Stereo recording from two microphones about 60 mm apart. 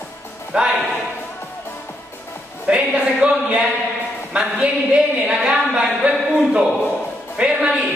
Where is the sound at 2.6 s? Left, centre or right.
Centre.